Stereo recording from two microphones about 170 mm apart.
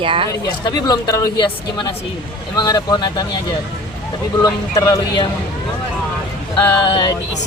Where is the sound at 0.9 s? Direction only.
25° left (ahead or behind).